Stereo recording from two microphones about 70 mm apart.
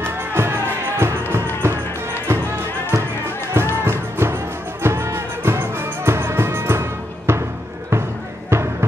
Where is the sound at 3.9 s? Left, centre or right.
Right.